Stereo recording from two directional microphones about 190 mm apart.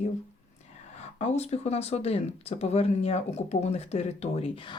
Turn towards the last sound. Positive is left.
turn(degrees=30)  # may be behind; listen again after turning